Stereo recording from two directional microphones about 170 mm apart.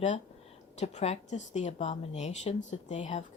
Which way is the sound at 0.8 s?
40° left (ahead or behind).